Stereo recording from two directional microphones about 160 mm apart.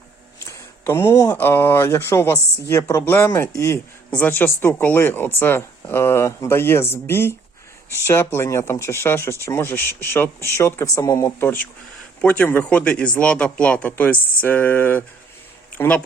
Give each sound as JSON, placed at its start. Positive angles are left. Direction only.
{"t": 0.3, "sound": "speech", "side_deg": 15}